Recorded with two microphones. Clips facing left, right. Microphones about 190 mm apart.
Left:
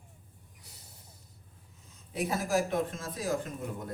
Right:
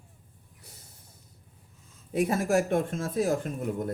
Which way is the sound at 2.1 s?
50° right (ahead or behind).